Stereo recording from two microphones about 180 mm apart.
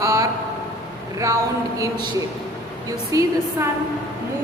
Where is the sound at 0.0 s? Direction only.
15° right (ahead or behind).